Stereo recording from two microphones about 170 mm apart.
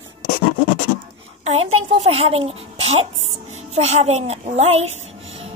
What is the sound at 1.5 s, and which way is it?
A child's voice, 40° right (ahead or behind).